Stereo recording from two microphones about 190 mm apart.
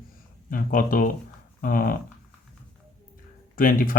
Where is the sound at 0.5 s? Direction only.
45° left (ahead or behind).